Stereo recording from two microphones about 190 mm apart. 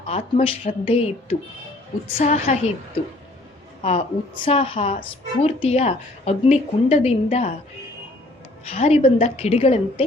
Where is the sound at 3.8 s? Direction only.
30° left (ahead or behind).